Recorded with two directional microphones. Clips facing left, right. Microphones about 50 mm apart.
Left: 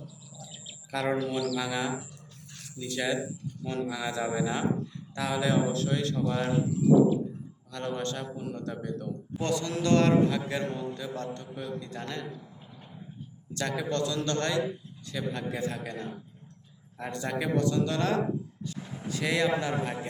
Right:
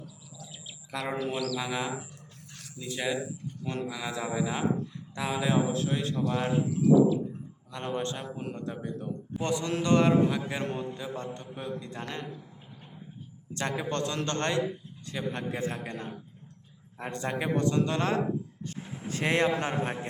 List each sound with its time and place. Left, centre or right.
0.7 s a sound: centre
1.1 s a man's voice: right
3.8 s speech: centre
5.1 s a man's voice: right
7.7 s a man's voice: right
8.4 s a man's voice: right
8.6 s a man's voice: right
10.6 s a man's voice: right
13.5 s a man's voice: right
18.6 s a sound: right
19.0 s a man's voice: right